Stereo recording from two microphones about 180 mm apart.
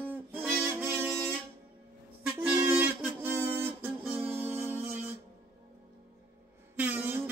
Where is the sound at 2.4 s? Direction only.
10° right (ahead or behind).